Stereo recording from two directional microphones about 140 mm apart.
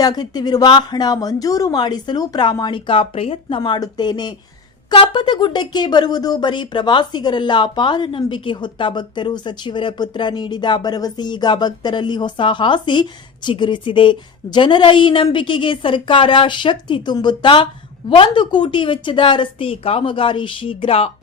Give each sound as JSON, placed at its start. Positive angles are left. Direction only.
{"t": 0.0, "sound": "speech", "side_deg": 30}